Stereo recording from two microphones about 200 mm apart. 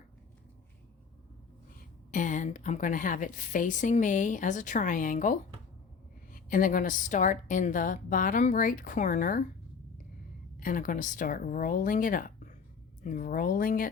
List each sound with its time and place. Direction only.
2.0 s a woman's voice: 40° left (ahead or behind)
10.6 s speech: 45° left (ahead or behind)